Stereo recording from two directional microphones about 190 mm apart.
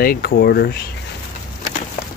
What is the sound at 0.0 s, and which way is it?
Speech, 55° left (ahead or behind).